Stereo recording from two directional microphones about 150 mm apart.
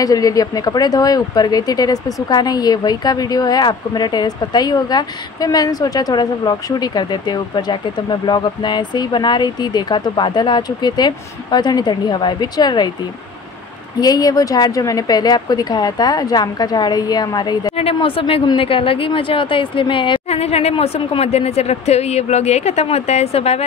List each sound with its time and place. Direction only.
0.0 s a woman's voice: 25° left (ahead or behind)
13.9 s a woman's voice: 25° left (ahead or behind)
17.7 s a woman's voice: 40° left (ahead or behind)